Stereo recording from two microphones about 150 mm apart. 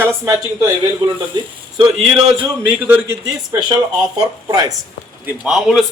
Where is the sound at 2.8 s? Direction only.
15° right (ahead or behind).